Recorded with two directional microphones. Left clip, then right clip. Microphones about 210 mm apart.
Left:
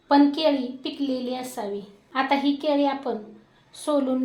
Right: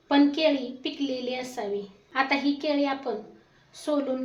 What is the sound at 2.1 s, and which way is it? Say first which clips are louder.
A woman's voice: left 2 dB; 20° left (ahead or behind).